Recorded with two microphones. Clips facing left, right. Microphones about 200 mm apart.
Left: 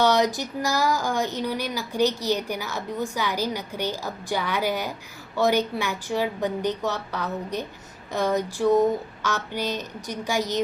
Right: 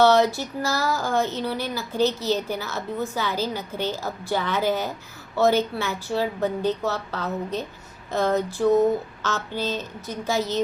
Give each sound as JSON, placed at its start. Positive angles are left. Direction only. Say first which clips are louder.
{"t": 0.0, "sound": "speech", "louder": "right 3 dB", "side_deg": 15}